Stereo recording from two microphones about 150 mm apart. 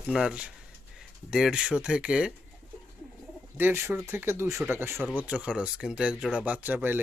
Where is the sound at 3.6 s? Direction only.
15° right (ahead or behind).